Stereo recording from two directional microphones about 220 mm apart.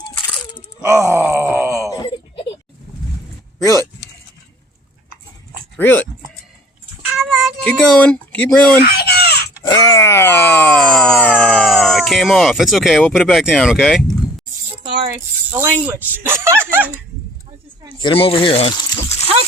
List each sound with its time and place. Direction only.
0.9 s groan: 15° right (ahead or behind)
1.9 s wail: 20° left (ahead or behind)
3.6 s speech: 15° left (ahead or behind)
5.8 s speech: 10° left (ahead or behind)
7.2 s speech: centre (ahead or behind)
8.8 s a sound: 45° left (ahead or behind)
9.6 s wail: 15° left (ahead or behind); by 14.0 s centre (ahead or behind)
15.4 s speech: 10° right (ahead or behind)
18.0 s speech: 25° left (ahead or behind)